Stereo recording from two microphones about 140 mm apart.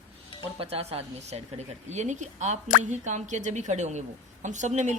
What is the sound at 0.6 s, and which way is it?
A woman's voice, 45° right (ahead or behind).